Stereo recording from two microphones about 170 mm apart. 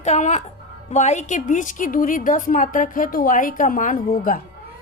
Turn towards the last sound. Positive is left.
turn(degrees=50)  # may be behind; listen again after turning